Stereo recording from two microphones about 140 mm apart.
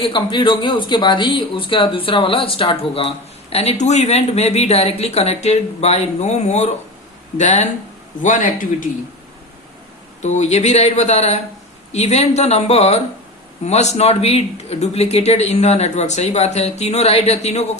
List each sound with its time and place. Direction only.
0.0 s speech: 35° left (ahead or behind); by 7.7 s 55° left (ahead or behind)
8.2 s a man's voice: 70° left (ahead or behind)
10.2 s speech: 55° left (ahead or behind)